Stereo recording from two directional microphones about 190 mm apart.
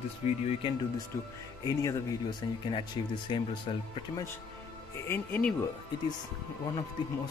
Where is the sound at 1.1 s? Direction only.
15° left (ahead or behind).